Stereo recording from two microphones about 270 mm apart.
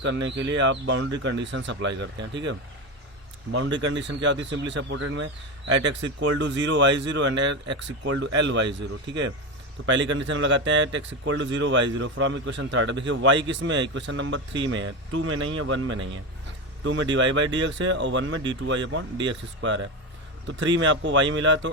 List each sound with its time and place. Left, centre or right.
0.0 s speech: right
9.8 s speech: right